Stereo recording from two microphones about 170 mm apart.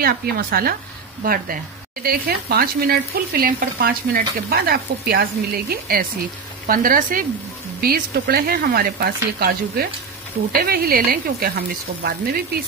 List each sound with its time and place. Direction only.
0.0 s speech: 65° right (ahead or behind)